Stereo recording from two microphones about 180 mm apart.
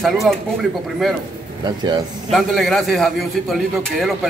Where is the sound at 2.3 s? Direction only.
Centre (ahead or behind).